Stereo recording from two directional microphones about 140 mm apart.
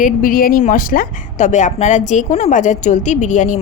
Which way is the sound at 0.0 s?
80° left.